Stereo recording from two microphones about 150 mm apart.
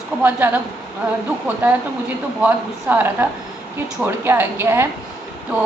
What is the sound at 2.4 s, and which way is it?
A woman's voice, 10° right (ahead or behind).